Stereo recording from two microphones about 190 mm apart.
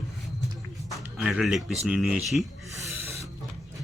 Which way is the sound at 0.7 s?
Centre (ahead or behind).